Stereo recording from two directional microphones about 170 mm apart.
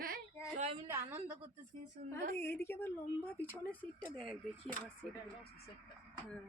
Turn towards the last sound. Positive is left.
turn(degrees=0)  # may be behind; listen again after turning